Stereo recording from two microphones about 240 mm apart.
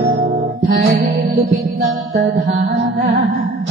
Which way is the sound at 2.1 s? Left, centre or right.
Right.